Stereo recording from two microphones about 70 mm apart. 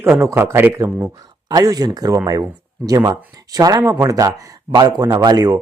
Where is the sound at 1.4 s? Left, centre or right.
Right.